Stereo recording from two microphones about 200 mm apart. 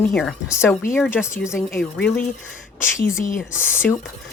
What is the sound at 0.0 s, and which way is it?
Speech, 5° left (ahead or behind).